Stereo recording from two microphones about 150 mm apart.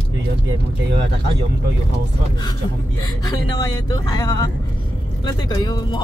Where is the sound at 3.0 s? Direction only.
25° left (ahead or behind).